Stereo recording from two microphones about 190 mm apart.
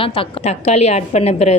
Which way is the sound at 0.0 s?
30° left (ahead or behind).